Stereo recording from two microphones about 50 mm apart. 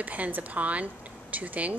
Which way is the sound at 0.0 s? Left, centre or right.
Right.